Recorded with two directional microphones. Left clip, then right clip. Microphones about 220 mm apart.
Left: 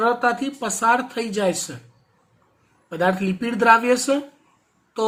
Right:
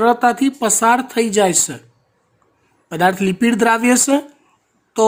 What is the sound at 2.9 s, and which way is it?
Speech, 55° right (ahead or behind).